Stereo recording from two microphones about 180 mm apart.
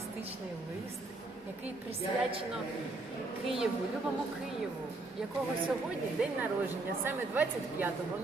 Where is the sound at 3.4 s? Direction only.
Centre (ahead or behind).